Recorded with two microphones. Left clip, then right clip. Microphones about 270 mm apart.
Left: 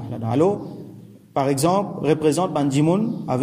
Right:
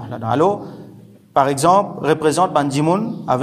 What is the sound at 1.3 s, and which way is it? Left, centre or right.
A man's voice, centre.